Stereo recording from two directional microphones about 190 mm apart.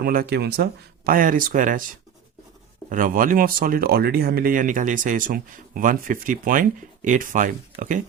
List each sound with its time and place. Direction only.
0.0 s speech: 50° right (ahead or behind)
2.9 s speech: 45° right (ahead or behind)